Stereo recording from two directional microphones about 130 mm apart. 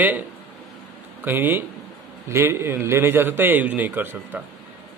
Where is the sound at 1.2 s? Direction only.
15° right (ahead or behind).